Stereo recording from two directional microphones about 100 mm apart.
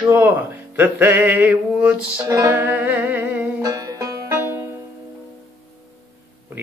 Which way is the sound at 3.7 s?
35° right (ahead or behind).